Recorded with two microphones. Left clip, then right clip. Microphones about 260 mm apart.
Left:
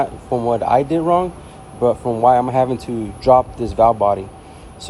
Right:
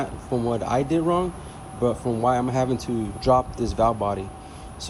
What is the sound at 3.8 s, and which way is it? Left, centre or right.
Speech, left.